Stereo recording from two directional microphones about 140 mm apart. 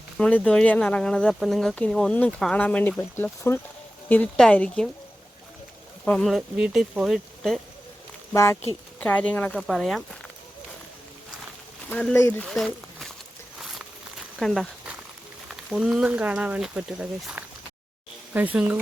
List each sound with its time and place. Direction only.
0.2 s speech: 10° left (ahead or behind)
6.1 s speech: 5° left (ahead or behind)
8.3 s speech: 20° left (ahead or behind)
9.0 s speech: 10° left (ahead or behind)
11.9 s speech: 5° left (ahead or behind)
12.5 s a sound: centre (ahead or behind)
14.3 s speech: 5° left (ahead or behind)
15.7 s speech: 5° right (ahead or behind)